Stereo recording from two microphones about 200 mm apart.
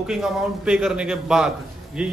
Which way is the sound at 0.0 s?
5° right (ahead or behind).